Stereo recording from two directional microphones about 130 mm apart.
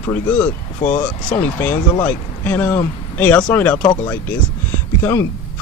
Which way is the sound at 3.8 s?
30° left (ahead or behind).